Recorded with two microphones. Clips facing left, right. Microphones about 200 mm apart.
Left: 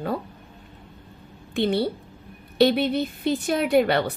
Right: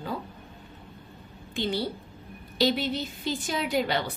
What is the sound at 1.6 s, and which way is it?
A woman's voice, 65° left (ahead or behind).